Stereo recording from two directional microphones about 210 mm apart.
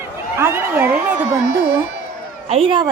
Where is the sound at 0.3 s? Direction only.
10° right (ahead or behind).